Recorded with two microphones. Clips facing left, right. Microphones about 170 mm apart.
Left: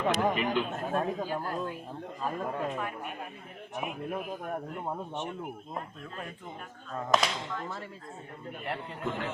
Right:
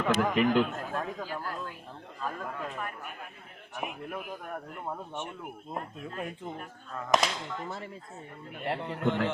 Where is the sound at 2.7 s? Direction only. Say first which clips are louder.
Left 3 dB; centre (ahead or behind).